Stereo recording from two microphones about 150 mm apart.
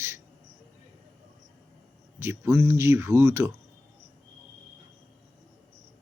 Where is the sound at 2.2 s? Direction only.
15° right (ahead or behind).